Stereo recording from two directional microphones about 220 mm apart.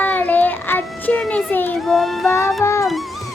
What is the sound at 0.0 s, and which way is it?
Child singing, 10° left (ahead or behind).